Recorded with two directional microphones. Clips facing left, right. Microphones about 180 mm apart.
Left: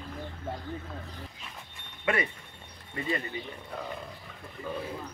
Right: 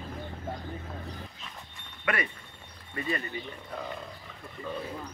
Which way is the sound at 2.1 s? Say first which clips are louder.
Left 2 dB; 25° left (ahead or behind).